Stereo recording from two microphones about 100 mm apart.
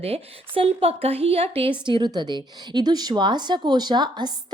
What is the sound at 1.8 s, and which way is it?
A woman's voice, 50° right (ahead or behind).